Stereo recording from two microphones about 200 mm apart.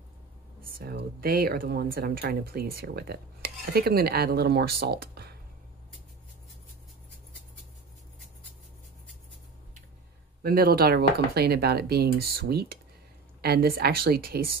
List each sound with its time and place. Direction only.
0.7 s speech: 50° right (ahead or behind)
10.4 s speech: 50° right (ahead or behind)